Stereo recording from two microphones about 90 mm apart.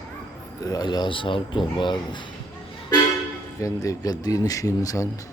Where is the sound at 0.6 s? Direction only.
45° left (ahead or behind); by 1.9 s 65° left (ahead or behind).